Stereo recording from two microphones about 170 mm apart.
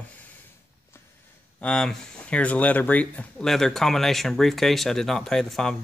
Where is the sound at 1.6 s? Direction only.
5° left (ahead or behind).